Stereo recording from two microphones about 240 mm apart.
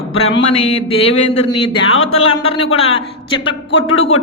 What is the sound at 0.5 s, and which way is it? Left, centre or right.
A man's voice, left.